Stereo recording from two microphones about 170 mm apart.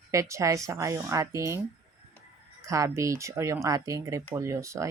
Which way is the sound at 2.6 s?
20° right (ahead or behind).